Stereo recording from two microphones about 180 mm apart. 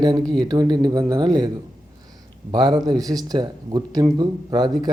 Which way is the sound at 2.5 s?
25° right (ahead or behind).